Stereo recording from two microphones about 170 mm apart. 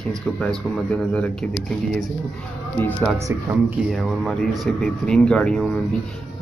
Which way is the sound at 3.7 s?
Centre (ahead or behind).